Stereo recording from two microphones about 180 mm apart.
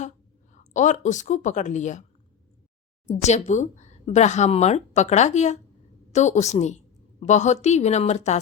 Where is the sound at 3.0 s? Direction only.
40° left (ahead or behind).